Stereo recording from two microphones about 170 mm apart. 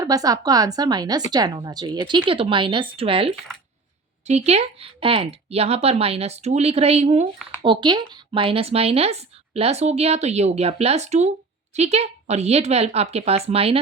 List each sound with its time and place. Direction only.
0.0 s a woman's voice: 20° right (ahead or behind); by 7.3 s 40° right (ahead or behind)
7.6 s speech: 30° right (ahead or behind)